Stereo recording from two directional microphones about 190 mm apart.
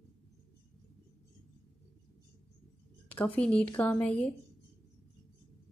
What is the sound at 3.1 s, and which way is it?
Speech, 10° left (ahead or behind).